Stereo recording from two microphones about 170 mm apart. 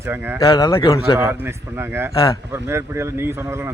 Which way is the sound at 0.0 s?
15° right (ahead or behind).